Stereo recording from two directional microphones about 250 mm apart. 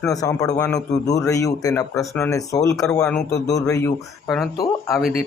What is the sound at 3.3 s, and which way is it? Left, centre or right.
Speech, left.